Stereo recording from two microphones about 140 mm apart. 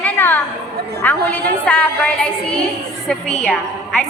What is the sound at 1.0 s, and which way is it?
A woman's voice, 10° left (ahead or behind).